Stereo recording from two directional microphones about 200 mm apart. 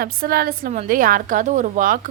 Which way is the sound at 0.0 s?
45° right (ahead or behind).